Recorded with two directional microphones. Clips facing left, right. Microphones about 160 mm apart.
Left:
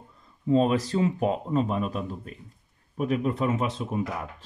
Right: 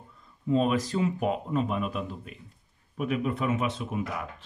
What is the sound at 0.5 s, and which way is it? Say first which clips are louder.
Speech: left 3 dB; 35° left (ahead or behind).